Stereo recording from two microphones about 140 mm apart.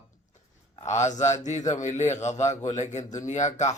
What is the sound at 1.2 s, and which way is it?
Speech, 55° left (ahead or behind).